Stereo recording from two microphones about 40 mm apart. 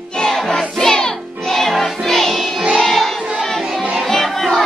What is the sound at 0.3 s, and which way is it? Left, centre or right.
Music, centre.